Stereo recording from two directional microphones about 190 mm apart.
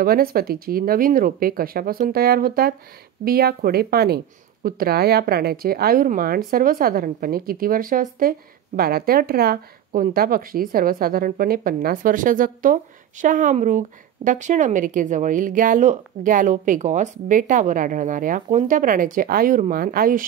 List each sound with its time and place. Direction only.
0.0 s a woman's voice: 50° right (ahead or behind)